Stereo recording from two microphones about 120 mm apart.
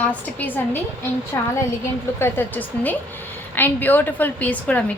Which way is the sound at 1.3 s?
25° left (ahead or behind).